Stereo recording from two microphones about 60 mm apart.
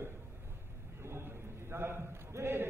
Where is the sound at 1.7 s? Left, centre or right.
Right.